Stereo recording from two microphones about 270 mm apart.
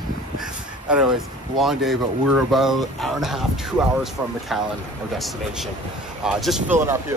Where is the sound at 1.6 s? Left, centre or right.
Centre.